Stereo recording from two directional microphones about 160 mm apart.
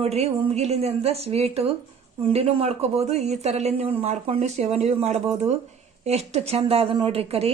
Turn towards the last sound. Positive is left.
turn(degrees=-40)  # may be behind; listen again after turning